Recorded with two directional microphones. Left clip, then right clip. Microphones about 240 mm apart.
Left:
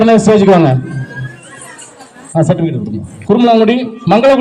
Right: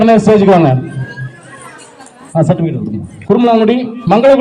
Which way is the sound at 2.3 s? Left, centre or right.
Left.